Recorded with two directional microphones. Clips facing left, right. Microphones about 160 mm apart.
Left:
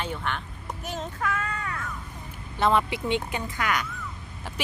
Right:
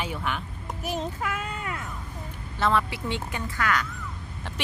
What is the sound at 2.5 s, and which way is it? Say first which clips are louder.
Speech: left 2 dB; 20° left (ahead or behind).